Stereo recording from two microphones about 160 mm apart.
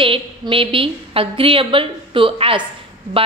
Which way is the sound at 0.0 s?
35° right (ahead or behind).